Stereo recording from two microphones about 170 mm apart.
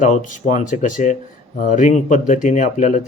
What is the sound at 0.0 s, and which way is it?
Speech, 45° left (ahead or behind).